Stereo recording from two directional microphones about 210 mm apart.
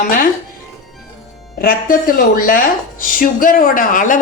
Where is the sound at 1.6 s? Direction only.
45° left (ahead or behind).